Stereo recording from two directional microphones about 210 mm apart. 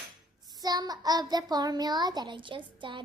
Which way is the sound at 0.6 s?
20° right (ahead or behind).